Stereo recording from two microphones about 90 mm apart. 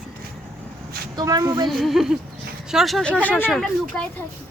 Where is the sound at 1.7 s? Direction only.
5° right (ahead or behind).